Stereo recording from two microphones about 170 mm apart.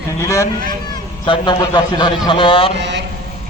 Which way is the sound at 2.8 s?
90° right.